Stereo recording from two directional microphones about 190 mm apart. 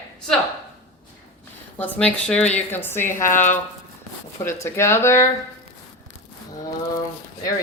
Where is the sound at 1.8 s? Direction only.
5° left (ahead or behind).